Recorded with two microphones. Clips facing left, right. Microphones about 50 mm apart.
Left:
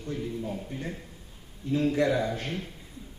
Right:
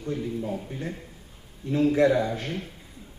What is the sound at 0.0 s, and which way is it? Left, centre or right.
Speech, right.